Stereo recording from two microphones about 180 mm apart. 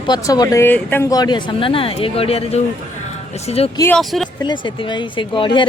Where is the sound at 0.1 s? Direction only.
20° left (ahead or behind); by 3.7 s 35° left (ahead or behind).